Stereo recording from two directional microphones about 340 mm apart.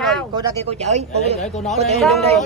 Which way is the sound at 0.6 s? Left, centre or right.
Centre.